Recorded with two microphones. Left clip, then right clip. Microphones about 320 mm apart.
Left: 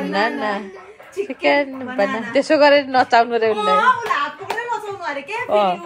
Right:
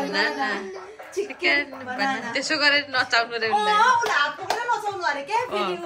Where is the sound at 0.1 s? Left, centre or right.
Centre.